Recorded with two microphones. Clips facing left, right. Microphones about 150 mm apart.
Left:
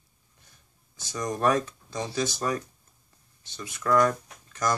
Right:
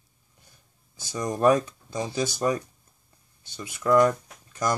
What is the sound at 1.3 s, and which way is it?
Speech, 15° right (ahead or behind).